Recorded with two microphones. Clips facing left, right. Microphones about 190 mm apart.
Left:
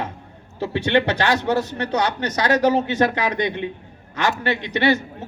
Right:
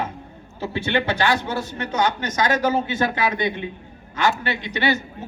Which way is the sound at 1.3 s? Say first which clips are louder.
Left 5 dB; 75° left (ahead or behind).